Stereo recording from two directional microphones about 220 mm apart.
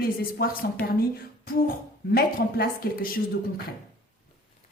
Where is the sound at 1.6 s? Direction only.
45° left (ahead or behind).